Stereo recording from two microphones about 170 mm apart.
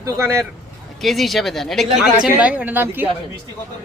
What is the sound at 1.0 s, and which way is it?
A woman's voice, centre (ahead or behind).